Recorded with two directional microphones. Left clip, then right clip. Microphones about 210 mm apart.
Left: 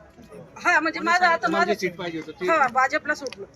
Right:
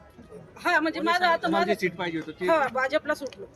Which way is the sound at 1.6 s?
50° right (ahead or behind).